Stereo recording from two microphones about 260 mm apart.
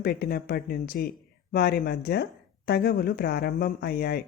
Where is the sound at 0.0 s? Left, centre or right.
Left.